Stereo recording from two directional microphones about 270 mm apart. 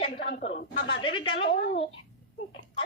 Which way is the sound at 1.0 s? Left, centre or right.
Centre.